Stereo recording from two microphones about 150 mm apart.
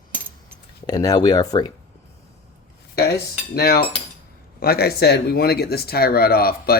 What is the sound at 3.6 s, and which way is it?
Speech, 90° left.